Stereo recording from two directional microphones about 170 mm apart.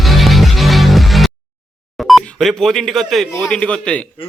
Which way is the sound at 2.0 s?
Centre (ahead or behind).